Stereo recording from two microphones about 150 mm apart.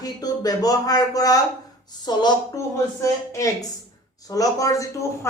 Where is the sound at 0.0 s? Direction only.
25° left (ahead or behind).